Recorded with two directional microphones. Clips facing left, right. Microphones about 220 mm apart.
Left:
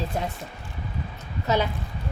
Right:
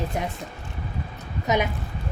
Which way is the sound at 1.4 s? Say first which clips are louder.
Right 1 dB; 15° right (ahead or behind).